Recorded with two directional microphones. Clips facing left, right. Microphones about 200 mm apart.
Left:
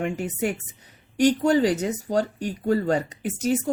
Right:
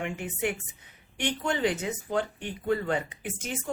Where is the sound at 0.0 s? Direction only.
40° left (ahead or behind).